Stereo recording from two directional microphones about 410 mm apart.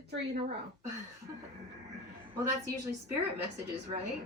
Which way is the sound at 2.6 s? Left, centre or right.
Centre.